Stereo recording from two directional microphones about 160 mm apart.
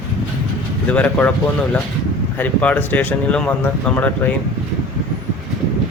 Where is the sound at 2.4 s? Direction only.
10° left (ahead or behind).